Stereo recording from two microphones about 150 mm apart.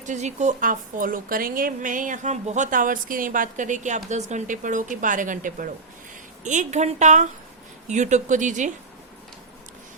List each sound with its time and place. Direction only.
0.0 s a woman's voice: 50° right (ahead or behind)
6.4 s a woman's voice: 55° right (ahead or behind)